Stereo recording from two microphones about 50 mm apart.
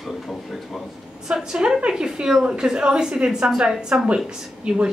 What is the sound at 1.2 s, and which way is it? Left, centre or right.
A woman's voice, centre.